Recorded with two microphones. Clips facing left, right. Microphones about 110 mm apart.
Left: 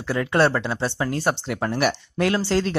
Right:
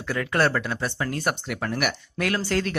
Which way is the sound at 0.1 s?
25° left (ahead or behind).